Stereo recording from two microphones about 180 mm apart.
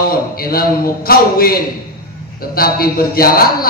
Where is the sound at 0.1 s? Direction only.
55° left (ahead or behind).